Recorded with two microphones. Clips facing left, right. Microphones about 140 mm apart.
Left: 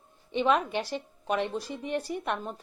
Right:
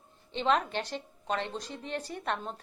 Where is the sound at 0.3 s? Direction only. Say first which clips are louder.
Left 3 dB; 10° left (ahead or behind).